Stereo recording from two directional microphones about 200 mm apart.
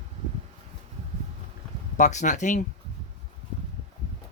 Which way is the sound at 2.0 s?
35° left (ahead or behind).